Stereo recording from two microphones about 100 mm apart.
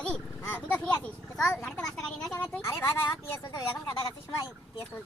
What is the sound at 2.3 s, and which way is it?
Speech, 20° left (ahead or behind).